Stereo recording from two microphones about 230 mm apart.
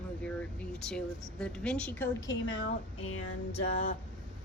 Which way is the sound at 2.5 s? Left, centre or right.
Left.